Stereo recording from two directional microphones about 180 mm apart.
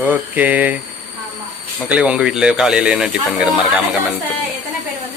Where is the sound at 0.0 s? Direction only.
10° right (ahead or behind).